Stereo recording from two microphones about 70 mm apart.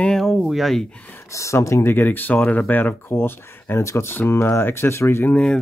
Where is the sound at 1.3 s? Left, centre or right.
Left.